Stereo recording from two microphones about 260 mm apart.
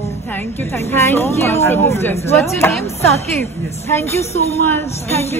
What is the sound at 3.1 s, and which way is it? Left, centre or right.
Speech, left.